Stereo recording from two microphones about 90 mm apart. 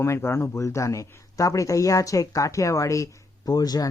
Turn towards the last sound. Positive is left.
turn(degrees=45)  # may be behind; listen again after turning